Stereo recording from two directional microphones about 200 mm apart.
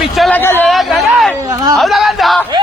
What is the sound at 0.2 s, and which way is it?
Speech, 10° left (ahead or behind).